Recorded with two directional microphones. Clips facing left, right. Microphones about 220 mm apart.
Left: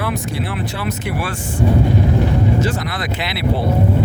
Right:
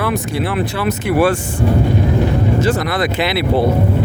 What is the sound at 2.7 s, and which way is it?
Speech, 70° right (ahead or behind).